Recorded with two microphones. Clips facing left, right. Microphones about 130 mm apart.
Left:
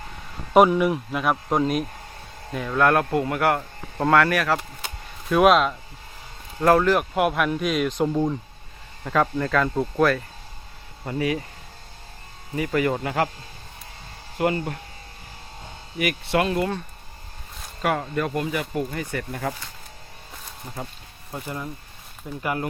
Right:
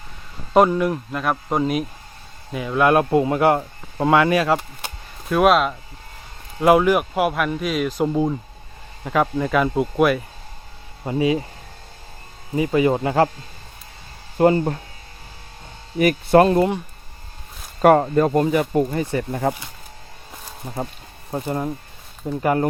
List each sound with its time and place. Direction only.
0.5 s speech: 5° left (ahead or behind); by 3.7 s 20° right (ahead or behind)
3.9 s speech: 10° right (ahead or behind)
5.3 s speech: centre (ahead or behind)
6.6 s speech: 10° right (ahead or behind)
11.0 s speech: 20° right (ahead or behind)
12.5 s speech: 20° right (ahead or behind)
14.3 s speech: 30° right (ahead or behind)
16.0 s speech: 40° right (ahead or behind)
17.8 s speech: 45° right (ahead or behind)
18.9 s speech: 25° right (ahead or behind)
21.2 s speech: 35° right (ahead or behind)